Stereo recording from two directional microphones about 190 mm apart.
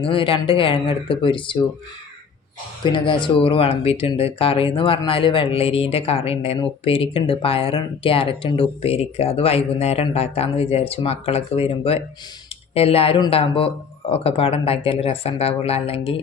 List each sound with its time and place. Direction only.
0.0 s speech: 25° left (ahead or behind)
2.8 s speech: 25° left (ahead or behind)